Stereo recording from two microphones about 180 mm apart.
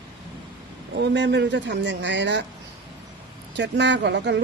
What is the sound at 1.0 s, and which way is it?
Speech, 75° right (ahead or behind).